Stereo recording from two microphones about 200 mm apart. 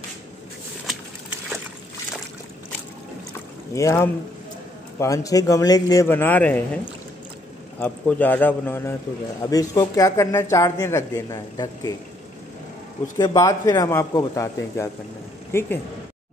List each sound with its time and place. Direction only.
3.7 s speech: 15° left (ahead or behind)
7.8 s speech: 10° left (ahead or behind)
13.2 s speech: 20° left (ahead or behind)